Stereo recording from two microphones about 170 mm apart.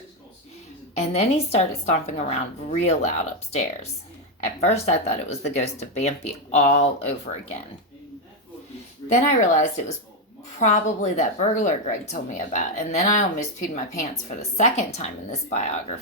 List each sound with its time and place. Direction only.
0.9 s speech: 40° left (ahead or behind)
9.0 s a woman's voice: 45° left (ahead or behind)